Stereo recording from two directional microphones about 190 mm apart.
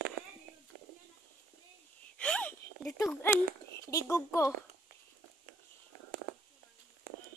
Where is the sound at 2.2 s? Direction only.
5° left (ahead or behind).